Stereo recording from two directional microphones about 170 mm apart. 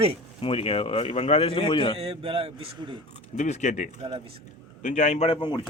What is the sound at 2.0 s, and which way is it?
Speech, 35° right (ahead or behind).